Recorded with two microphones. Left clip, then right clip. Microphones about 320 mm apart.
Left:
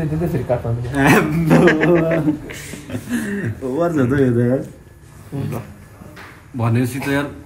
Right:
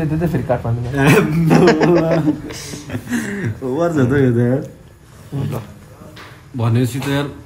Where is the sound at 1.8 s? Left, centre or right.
Centre.